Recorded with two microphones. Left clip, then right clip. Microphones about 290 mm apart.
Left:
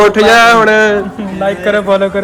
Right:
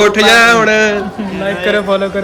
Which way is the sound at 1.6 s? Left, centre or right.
Left.